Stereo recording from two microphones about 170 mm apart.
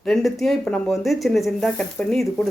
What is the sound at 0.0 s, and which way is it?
Speech, centre (ahead or behind).